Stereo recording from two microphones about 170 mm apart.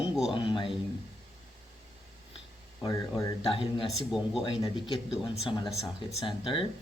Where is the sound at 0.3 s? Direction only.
30° left (ahead or behind).